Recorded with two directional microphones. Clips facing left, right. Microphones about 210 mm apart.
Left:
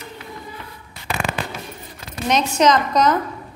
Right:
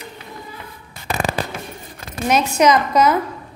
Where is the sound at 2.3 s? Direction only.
10° right (ahead or behind).